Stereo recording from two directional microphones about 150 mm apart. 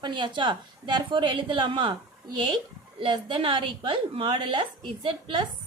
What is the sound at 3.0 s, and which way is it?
A woman's voice, 35° right (ahead or behind).